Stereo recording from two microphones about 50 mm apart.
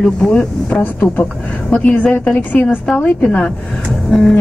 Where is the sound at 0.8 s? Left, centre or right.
Left.